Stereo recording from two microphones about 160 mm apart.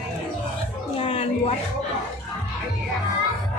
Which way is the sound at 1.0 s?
35° left (ahead or behind).